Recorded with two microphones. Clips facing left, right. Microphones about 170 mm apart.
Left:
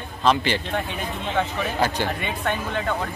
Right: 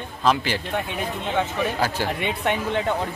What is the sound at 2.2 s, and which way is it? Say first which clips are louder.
Speech: right 2 dB; 25° right (ahead or behind).